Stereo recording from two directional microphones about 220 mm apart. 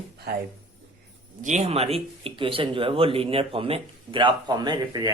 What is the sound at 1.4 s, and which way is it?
Speech, 30° right (ahead or behind).